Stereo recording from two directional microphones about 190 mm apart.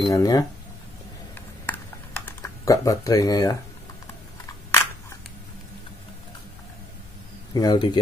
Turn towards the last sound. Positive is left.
turn(degrees=20)  # may be behind; listen again after turning